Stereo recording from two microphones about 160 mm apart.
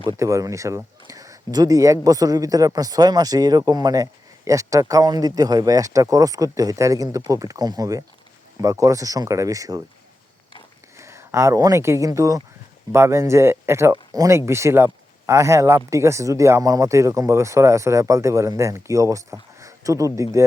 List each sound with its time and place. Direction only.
0.2 s speech: 20° right (ahead or behind)
10.9 s speech: 15° right (ahead or behind)